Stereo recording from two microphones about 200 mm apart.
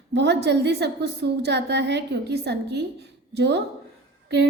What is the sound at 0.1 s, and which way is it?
A woman's voice, 60° right (ahead or behind).